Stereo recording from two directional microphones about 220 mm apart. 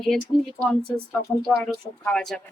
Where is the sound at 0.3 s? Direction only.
30° left (ahead or behind).